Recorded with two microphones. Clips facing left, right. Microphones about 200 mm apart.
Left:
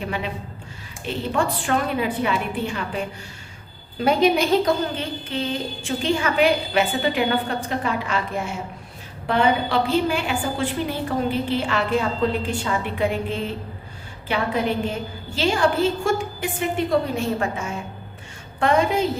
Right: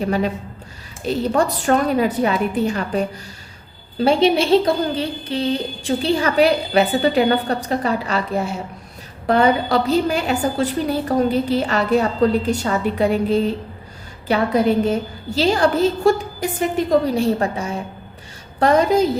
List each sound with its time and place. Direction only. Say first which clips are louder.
0.0 s speech: right 8 dB; 40° right (ahead or behind)
4.0 s speech: right 3 dB; 30° right (ahead or behind)